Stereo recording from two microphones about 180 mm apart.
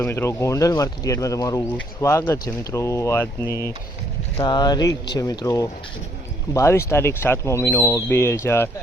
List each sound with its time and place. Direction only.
0.0 s speech: 15° left (ahead or behind)
3.4 s speech: 15° right (ahead or behind)
4.4 s speech: 25° left (ahead or behind)